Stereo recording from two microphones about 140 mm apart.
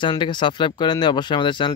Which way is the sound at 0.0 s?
35° left (ahead or behind).